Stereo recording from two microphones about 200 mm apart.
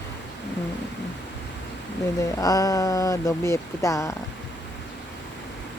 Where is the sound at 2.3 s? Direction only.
15° left (ahead or behind).